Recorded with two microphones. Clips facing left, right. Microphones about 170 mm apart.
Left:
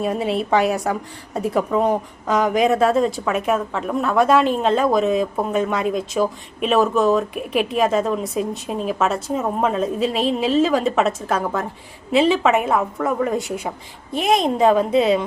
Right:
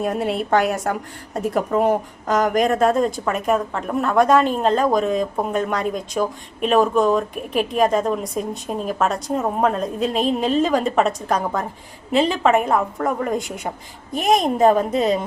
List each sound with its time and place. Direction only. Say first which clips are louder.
0.0 s a woman's voice: left 1 dB; centre (ahead or behind)
14.2 s a woman's voice: even; 45° right (ahead or behind)
14.7 s a woman's voice: even; centre (ahead or behind)
14.9 s a woman's voice: left 3 dB; 40° right (ahead or behind)